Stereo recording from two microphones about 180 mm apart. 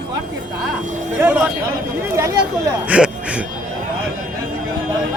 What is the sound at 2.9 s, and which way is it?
Speech, 5° right (ahead or behind).